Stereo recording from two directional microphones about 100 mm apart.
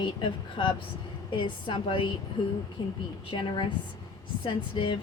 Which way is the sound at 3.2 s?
55° left (ahead or behind).